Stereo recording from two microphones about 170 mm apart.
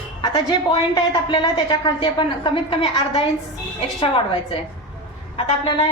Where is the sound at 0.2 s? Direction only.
25° left (ahead or behind).